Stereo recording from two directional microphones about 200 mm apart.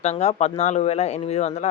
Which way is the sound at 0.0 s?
30° left (ahead or behind).